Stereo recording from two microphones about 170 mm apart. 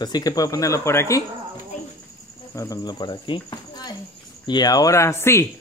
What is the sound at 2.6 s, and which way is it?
Speech, 20° left (ahead or behind).